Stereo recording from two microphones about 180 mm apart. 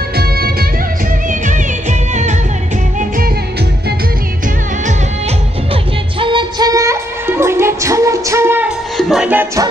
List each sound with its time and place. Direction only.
0.2 s music: 60° right (ahead or behind)
1.4 s music: 45° right (ahead or behind)
6.1 s music: 25° right (ahead or behind); by 9.7 s 10° right (ahead or behind)